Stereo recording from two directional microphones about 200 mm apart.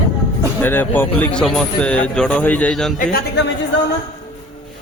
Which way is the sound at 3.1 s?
60° left (ahead or behind).